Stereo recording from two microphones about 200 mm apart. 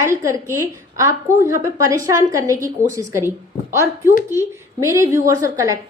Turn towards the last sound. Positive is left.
turn(degrees=-15)  # may be behind; listen again after turning